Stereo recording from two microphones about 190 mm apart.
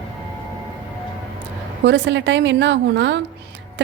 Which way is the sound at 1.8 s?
70° right (ahead or behind).